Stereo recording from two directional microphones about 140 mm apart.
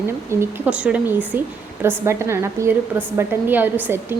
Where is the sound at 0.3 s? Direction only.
15° right (ahead or behind).